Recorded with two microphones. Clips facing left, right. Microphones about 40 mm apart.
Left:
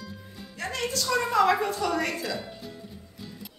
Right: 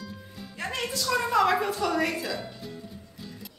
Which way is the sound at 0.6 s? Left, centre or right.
Centre.